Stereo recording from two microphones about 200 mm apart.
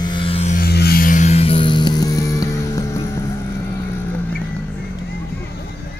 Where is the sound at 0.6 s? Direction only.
50° left (ahead or behind); by 3.0 s 15° left (ahead or behind).